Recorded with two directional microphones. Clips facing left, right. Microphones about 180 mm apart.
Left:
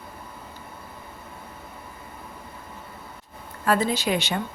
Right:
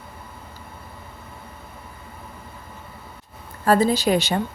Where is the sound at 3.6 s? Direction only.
35° right (ahead or behind).